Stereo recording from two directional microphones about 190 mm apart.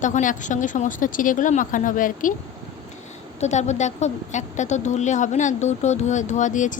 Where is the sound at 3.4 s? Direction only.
35° left (ahead or behind).